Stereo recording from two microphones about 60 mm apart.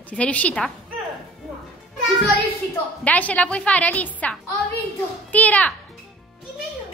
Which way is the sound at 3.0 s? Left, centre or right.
Left.